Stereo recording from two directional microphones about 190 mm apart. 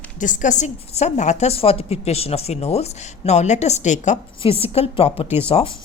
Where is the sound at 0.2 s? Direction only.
40° left (ahead or behind).